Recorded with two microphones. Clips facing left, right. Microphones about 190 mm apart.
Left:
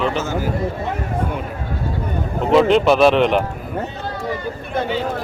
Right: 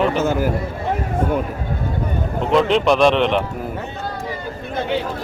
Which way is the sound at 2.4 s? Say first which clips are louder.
Left 3 dB; centre (ahead or behind).